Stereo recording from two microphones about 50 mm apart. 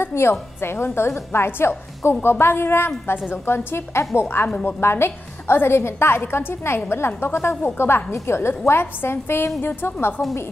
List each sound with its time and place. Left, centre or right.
0.0 s a woman's voice: left